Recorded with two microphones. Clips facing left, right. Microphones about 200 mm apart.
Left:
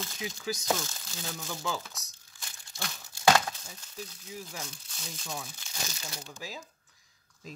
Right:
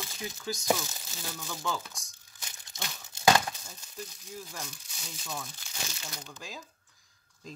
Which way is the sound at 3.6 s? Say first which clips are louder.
Left 1 dB; 5° left (ahead or behind).